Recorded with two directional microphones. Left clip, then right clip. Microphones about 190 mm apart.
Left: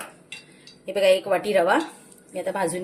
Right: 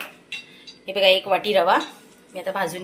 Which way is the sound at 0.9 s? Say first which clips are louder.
Right 1 dB; 30° left (ahead or behind).